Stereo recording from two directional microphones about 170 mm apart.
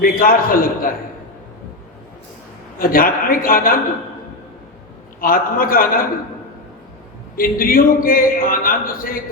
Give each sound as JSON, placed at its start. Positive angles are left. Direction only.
{"t": 0.0, "sound": "a man's voice", "side_deg": 55}
{"t": 2.7, "sound": "a man's voice", "side_deg": 55}
{"t": 5.2, "sound": "a man's voice", "side_deg": 55}
{"t": 7.3, "sound": "a man's voice", "side_deg": 55}